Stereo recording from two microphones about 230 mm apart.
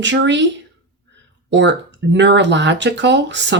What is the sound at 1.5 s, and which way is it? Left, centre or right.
Speech, right.